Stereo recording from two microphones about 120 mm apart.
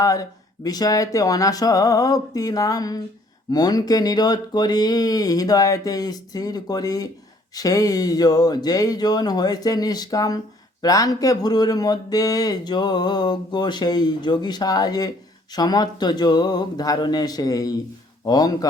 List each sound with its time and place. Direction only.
0.0 s speech: 30° left (ahead or behind)